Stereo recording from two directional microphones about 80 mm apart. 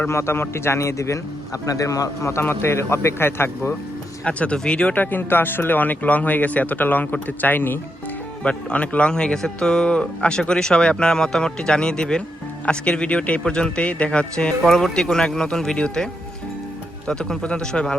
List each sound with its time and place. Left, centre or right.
0.1 s speech: left
4.2 s a man's voice: centre
17.1 s a man's voice: centre